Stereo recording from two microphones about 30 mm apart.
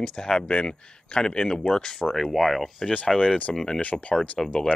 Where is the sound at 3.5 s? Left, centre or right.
Left.